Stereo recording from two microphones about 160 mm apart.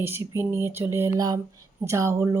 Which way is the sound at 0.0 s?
15° right (ahead or behind).